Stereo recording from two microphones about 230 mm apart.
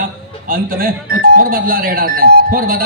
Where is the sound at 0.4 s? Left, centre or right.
Right.